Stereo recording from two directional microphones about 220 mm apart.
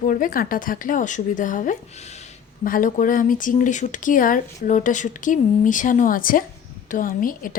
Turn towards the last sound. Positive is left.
turn(degrees=40)  # may be behind; listen again after turning